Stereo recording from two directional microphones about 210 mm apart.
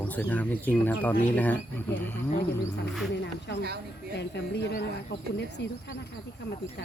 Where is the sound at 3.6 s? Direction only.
50° right (ahead or behind).